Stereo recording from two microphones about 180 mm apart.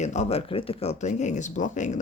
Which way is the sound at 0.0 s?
40° left (ahead or behind).